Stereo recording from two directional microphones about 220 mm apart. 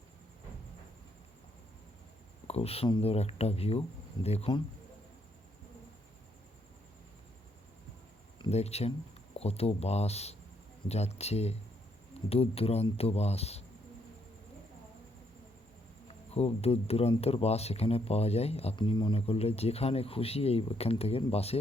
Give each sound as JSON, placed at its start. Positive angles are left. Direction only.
{"t": 2.5, "sound": "speech", "side_deg": 25}
{"t": 8.4, "sound": "speech", "side_deg": 30}
{"t": 16.0, "sound": "speech", "side_deg": 30}